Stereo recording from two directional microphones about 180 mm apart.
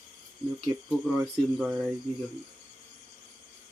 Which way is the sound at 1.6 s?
5° right (ahead or behind).